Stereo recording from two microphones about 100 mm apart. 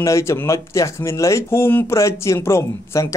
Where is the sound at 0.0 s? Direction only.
30° left (ahead or behind).